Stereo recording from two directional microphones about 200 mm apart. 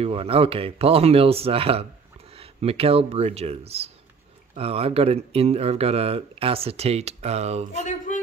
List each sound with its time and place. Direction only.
0.0 s speech: 30° right (ahead or behind)